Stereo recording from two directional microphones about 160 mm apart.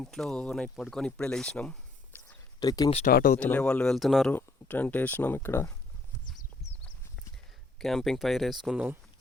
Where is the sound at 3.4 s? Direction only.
10° left (ahead or behind).